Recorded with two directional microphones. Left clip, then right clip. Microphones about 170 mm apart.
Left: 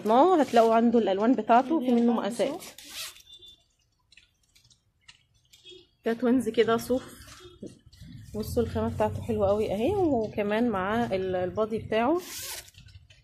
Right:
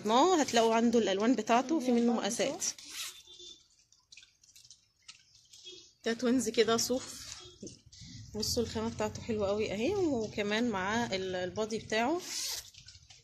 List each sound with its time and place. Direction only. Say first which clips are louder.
0.0 s speech: left 6 dB; 5° right (ahead or behind)
6.0 s speech: left 5 dB; 15° right (ahead or behind)
8.3 s speech: left 5 dB; 15° right (ahead or behind)
12.2 s speech: left 1 dB; 20° right (ahead or behind)